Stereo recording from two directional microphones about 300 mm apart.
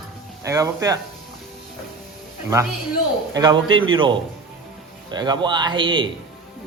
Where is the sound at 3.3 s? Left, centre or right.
Centre.